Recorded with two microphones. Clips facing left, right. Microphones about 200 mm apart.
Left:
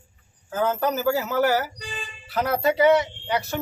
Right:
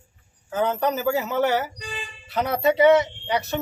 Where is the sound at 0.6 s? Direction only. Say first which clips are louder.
Even; centre (ahead or behind).